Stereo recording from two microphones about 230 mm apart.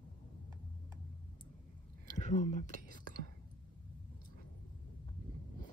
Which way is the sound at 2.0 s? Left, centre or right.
Left.